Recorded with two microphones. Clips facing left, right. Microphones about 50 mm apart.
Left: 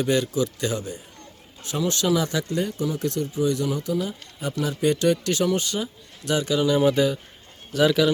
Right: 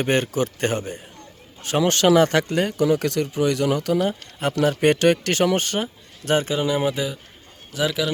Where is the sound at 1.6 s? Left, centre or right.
Right.